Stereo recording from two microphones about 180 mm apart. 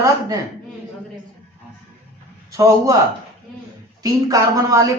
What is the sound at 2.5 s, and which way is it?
Speech, 20° right (ahead or behind).